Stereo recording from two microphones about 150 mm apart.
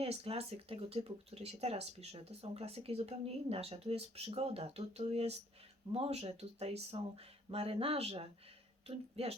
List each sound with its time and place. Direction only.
0.0 s speech: 40° right (ahead or behind)